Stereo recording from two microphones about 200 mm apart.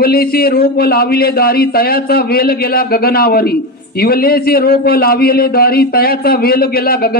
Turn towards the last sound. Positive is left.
turn(degrees=50)  # may be behind; listen again after turning